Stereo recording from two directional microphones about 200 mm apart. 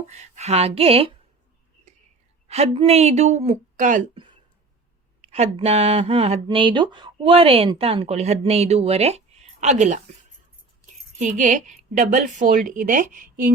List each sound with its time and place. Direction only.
0.1 s speech: 35° right (ahead or behind)
2.5 s speech: 30° right (ahead or behind)
4.1 s a sound: 25° right (ahead or behind)
5.2 s speech: 30° right (ahead or behind)
11.2 s speech: 40° right (ahead or behind)